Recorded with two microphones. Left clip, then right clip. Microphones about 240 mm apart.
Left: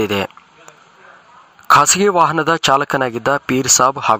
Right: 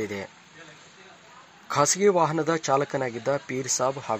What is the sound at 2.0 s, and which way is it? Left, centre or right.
Speech, left.